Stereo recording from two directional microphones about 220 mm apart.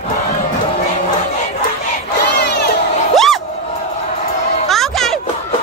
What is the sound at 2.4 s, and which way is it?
Crowd, 50° left (ahead or behind).